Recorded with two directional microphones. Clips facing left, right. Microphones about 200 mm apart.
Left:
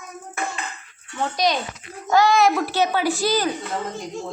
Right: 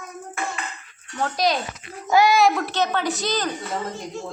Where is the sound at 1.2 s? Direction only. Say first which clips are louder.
Even; centre (ahead or behind).